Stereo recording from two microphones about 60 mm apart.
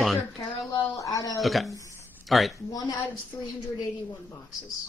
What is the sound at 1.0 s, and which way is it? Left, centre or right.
Speech, left.